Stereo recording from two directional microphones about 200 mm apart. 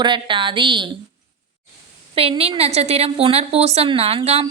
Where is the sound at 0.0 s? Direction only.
25° right (ahead or behind).